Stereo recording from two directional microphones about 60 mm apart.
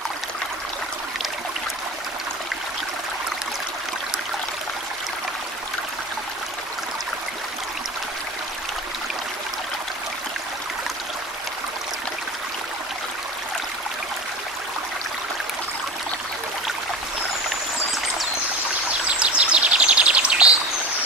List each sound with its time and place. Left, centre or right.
19.0 s bird vocalization: centre